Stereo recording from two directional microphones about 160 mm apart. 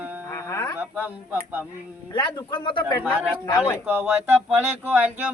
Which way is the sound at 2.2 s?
25° left (ahead or behind).